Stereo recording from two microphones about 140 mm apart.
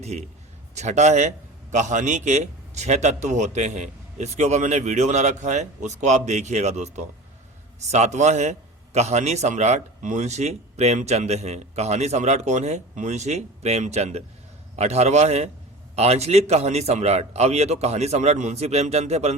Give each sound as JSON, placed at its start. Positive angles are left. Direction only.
{"t": 0.0, "sound": "a man's voice", "side_deg": -50}